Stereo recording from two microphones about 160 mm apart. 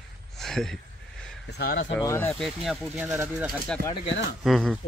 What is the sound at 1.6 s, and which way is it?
Speech, 65° left (ahead or behind).